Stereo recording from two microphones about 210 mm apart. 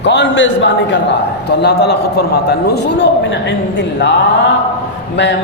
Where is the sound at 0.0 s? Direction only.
55° left (ahead or behind).